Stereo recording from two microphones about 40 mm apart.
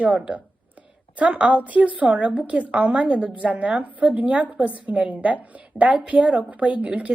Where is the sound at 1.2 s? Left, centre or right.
Right.